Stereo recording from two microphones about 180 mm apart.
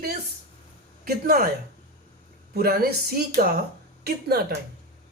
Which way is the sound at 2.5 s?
60° right (ahead or behind).